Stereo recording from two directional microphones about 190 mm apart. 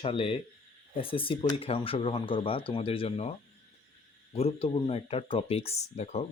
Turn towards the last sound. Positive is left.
turn(degrees=35)  # may be behind; listen again after turning